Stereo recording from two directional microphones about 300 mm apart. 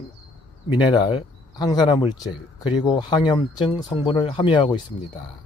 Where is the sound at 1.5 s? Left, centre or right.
Centre.